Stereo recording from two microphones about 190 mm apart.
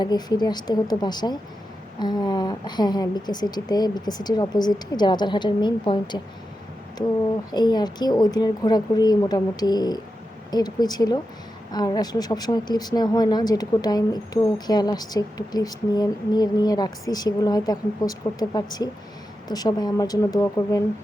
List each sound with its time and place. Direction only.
0.0 s a woman's voice: 20° left (ahead or behind)
7.5 s a woman's voice: 20° left (ahead or behind)